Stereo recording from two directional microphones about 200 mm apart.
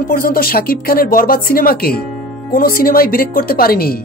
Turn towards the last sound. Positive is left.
turn(degrees=50)  # may be behind; listen again after turning